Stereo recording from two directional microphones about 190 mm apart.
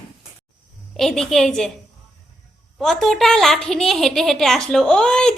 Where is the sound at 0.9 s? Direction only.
Centre (ahead or behind).